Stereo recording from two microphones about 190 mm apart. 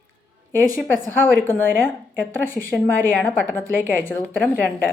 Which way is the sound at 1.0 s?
10° left (ahead or behind).